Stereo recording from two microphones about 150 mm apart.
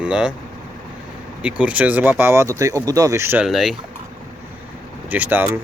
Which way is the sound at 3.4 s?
Centre (ahead or behind).